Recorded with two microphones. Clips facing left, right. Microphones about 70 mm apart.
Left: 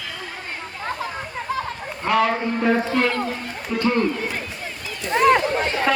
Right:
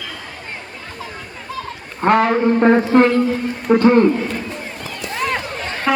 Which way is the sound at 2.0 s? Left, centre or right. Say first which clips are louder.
Right 6 dB; right.